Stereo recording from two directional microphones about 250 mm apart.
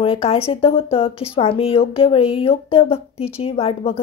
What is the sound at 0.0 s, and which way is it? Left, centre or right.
Speech, left.